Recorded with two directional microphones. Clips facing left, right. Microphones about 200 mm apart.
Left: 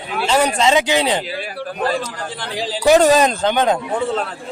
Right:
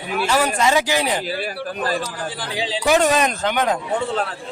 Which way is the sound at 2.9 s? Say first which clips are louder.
Left 5 dB; 35° left (ahead or behind).